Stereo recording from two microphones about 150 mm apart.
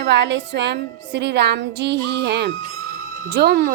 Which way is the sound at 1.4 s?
90° right.